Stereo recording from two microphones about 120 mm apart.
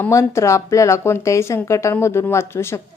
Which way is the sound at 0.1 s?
25° left (ahead or behind).